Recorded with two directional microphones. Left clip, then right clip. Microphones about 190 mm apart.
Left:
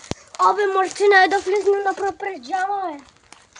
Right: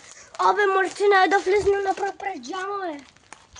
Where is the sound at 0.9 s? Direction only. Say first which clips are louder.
Left 5 dB; 25° left (ahead or behind).